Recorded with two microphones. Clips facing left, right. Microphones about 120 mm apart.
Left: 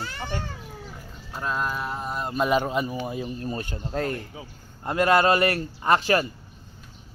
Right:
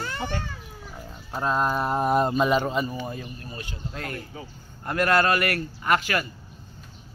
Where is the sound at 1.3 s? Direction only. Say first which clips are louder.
Right 4 dB; 35° right (ahead or behind).